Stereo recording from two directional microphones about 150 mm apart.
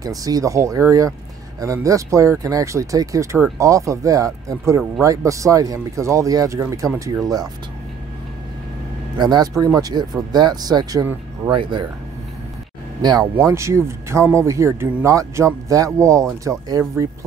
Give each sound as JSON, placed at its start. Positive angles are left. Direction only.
{"t": 0.0, "sound": "speech", "side_deg": -25}
{"t": 9.2, "sound": "speech", "side_deg": -25}
{"t": 13.0, "sound": "speech", "side_deg": -25}